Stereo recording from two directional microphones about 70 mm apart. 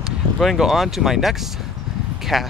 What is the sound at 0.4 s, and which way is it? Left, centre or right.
Speech, centre.